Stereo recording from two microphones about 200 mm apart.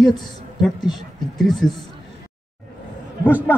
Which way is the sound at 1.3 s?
Centre (ahead or behind).